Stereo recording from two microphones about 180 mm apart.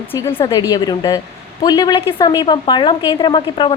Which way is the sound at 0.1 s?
15° left (ahead or behind).